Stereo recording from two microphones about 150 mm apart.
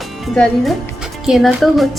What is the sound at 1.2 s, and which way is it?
Speech, centre (ahead or behind).